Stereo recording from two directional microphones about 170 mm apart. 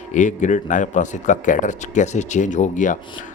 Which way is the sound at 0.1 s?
45° left (ahead or behind).